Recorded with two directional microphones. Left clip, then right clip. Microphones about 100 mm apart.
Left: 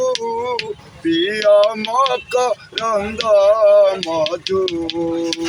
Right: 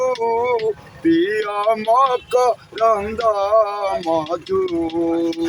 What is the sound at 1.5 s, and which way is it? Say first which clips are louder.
Speech: left 3 dB; 25° right (ahead or behind).